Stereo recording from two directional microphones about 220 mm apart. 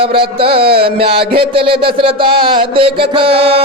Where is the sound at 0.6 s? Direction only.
45° right (ahead or behind).